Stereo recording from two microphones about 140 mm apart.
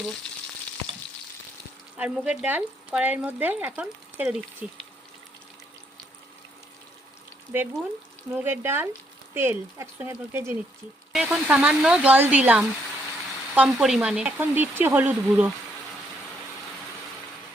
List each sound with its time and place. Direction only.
2.0 s speech: 5° right (ahead or behind)
8.3 s speech: 15° right (ahead or behind)